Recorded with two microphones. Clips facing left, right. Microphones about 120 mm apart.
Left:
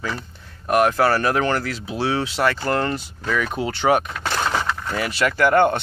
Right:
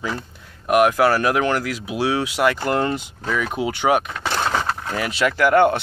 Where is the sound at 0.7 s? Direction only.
10° right (ahead or behind).